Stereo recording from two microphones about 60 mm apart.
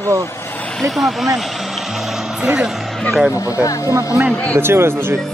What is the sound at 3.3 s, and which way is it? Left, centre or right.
Speech, left.